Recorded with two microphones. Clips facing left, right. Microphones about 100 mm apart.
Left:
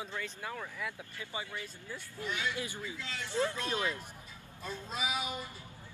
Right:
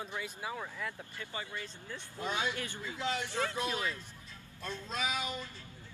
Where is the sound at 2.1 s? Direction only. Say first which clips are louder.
Right 2 dB; 20° right (ahead or behind).